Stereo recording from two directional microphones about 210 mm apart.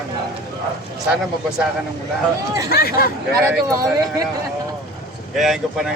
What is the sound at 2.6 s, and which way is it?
Speech, 45° left (ahead or behind).